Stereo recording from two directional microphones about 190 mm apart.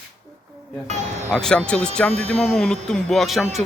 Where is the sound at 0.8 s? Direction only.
35° right (ahead or behind).